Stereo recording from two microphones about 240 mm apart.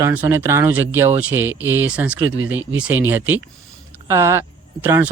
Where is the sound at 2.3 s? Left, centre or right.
Right.